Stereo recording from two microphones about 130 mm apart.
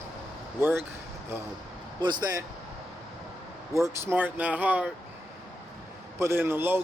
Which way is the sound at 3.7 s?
20° right (ahead or behind).